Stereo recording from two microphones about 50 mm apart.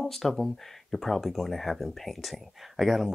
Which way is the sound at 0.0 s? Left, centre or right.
Centre.